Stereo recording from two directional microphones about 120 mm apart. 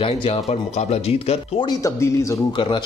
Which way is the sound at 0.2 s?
60° left (ahead or behind).